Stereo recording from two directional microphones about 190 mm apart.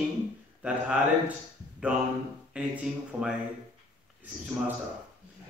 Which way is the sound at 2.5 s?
5° right (ahead or behind).